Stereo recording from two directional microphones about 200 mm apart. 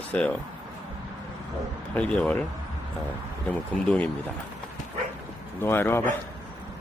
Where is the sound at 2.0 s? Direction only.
5° left (ahead or behind).